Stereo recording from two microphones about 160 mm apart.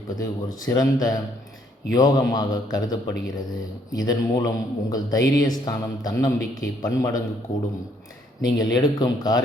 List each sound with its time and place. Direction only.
0.2 s a man's voice: 20° left (ahead or behind)
8.4 s a man's voice: 25° left (ahead or behind)